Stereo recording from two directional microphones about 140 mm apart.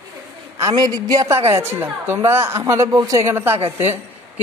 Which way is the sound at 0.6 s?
30° right (ahead or behind).